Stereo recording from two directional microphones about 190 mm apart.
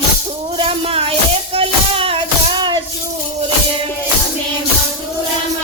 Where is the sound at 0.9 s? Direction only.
30° right (ahead or behind).